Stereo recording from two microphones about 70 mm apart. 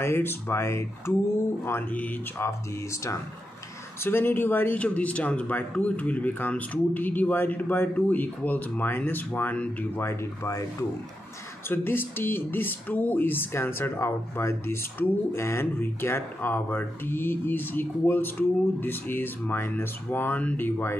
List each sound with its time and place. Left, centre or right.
0.0 s speech: left
1.7 s speech: left
2.3 s speech: left
4.0 s speech: left
11.7 s speech: left